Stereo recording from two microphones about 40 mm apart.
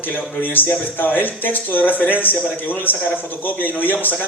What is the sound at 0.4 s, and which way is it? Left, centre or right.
A man's voice, left.